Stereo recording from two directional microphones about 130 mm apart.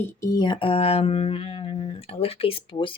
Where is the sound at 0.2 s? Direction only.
30° left (ahead or behind).